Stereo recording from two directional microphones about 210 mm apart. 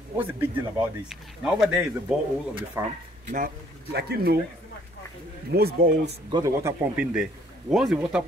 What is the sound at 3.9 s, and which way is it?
Speech, 50° right (ahead or behind).